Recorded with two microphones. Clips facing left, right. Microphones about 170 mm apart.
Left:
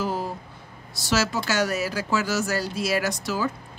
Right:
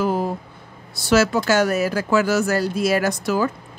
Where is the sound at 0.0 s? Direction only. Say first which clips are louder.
Right 6 dB; 55° right (ahead or behind).